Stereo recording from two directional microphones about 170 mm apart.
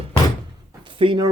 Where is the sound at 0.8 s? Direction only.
30° right (ahead or behind).